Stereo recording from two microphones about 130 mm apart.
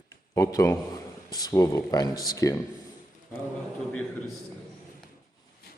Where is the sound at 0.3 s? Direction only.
25° left (ahead or behind).